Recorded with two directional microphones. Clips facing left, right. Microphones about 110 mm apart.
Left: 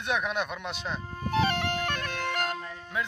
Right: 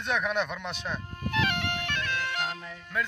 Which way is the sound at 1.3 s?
40° left (ahead or behind).